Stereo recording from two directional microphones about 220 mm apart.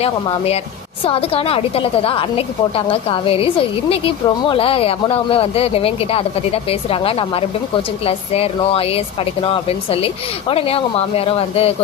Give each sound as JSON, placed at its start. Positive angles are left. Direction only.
{"t": 0.0, "sound": "a woman's voice", "side_deg": 25}